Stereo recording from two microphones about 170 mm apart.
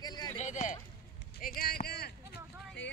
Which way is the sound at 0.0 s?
25° left (ahead or behind).